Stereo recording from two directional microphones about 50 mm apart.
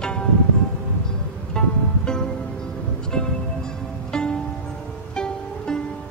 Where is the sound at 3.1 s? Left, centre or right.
Centre.